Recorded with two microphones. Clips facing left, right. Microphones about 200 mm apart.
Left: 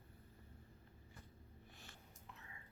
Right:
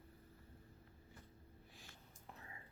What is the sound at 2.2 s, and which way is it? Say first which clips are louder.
Whispering: right 4 dB; 35° right (ahead or behind).